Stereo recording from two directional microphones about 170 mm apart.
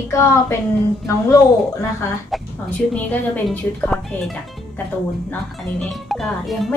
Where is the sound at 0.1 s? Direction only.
15° left (ahead or behind).